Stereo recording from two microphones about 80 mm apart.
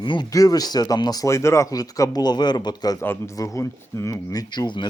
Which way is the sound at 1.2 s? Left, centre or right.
Left.